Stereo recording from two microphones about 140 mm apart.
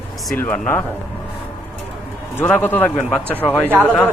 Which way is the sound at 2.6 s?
15° left (ahead or behind).